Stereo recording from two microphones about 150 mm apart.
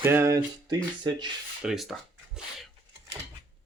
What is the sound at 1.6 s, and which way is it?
Speech, 5° right (ahead or behind).